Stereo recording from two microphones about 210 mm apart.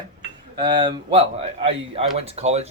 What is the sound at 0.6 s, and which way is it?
Speech, 20° right (ahead or behind).